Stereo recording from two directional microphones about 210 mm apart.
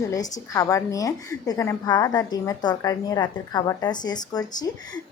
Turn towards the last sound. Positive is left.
turn(degrees=20)  # may be behind; listen again after turning